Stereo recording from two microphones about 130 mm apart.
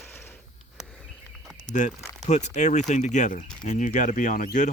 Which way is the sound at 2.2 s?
65° left (ahead or behind).